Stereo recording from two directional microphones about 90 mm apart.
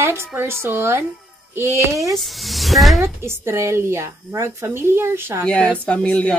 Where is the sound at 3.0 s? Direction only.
30° right (ahead or behind).